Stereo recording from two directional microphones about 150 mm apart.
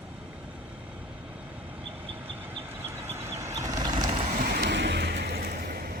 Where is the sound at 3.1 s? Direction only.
20° right (ahead or behind).